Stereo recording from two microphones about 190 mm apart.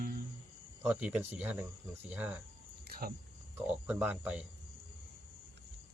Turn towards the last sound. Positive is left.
turn(degrees=-5)  # may be behind; listen again after turning